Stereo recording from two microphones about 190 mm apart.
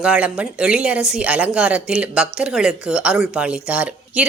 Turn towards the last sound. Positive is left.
turn(degrees=-5)  # may be behind; listen again after turning